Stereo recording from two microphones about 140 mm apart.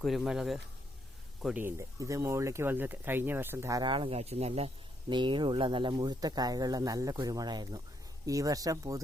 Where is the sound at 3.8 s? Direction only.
35° right (ahead or behind).